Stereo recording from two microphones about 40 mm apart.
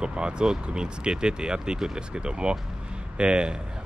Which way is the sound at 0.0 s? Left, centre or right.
Right.